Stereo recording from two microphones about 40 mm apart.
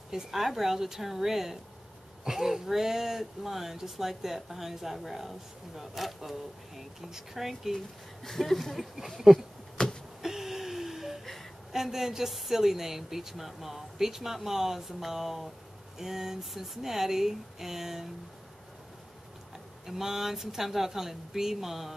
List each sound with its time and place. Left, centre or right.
0.1 s speech: centre
7.7 s speech: centre
9.8 s a sound: centre
10.2 s a sound: centre
11.7 s speech: centre
19.9 s speech: centre